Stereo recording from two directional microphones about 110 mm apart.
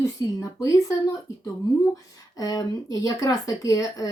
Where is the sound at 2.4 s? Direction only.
35° left (ahead or behind).